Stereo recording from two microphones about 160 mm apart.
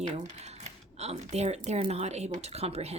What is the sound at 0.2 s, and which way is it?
Speech, 45° right (ahead or behind).